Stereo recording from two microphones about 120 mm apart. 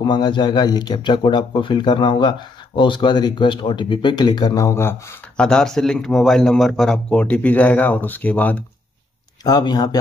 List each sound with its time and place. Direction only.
0.0 s speech: 40° left (ahead or behind)
5.4 s speech: 5° left (ahead or behind)
9.4 s speech: 35° left (ahead or behind)